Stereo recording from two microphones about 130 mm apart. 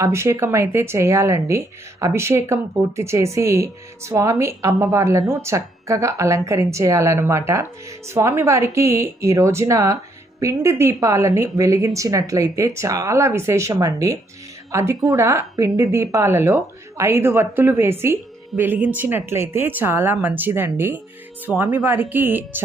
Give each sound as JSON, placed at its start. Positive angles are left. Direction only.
{"t": 0.0, "sound": "a woman's voice", "side_deg": -20}
{"t": 21.5, "sound": "speech", "side_deg": 5}
{"t": 21.8, "sound": "a woman's voice", "side_deg": -15}